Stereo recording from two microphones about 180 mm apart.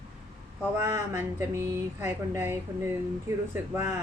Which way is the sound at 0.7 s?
15° right (ahead or behind).